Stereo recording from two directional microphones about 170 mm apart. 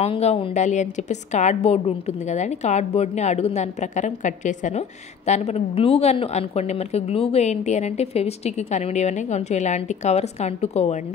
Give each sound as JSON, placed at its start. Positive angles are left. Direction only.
{"t": 0.0, "sound": "a woman's voice", "side_deg": 35}